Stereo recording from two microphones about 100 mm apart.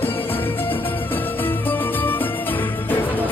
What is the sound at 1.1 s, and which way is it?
Music, 20° left (ahead or behind).